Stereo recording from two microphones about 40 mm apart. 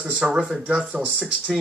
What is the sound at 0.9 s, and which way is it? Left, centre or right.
Speech, right.